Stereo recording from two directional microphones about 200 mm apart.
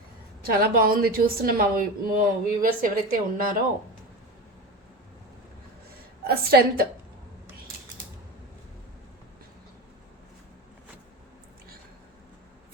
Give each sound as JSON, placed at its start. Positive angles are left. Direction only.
{"t": 0.4, "sound": "speech", "side_deg": -45}
{"t": 6.2, "sound": "speech", "side_deg": -50}